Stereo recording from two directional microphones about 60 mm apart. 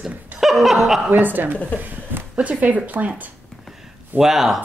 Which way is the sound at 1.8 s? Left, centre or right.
Right.